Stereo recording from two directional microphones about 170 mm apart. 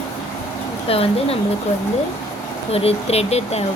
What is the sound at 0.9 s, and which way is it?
Speech, 35° left (ahead or behind).